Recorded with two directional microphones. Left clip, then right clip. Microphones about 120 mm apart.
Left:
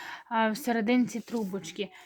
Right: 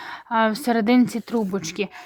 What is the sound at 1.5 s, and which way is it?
Speech, 65° right (ahead or behind).